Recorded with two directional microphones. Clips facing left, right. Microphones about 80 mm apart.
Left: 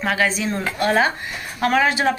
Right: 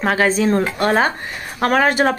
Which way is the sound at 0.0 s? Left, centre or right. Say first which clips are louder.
Right 5 dB; right.